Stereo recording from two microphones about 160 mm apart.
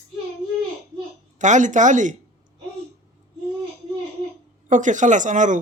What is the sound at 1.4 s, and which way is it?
Speech, 50° right (ahead or behind).